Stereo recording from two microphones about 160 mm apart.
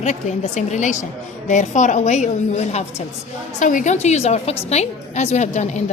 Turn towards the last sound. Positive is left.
turn(degrees=45)  # may be behind; listen again after turning